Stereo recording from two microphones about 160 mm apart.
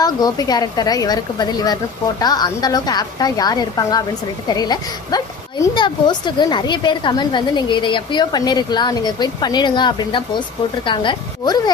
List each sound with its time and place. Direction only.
0.0 s a woman's voice: 25° left (ahead or behind)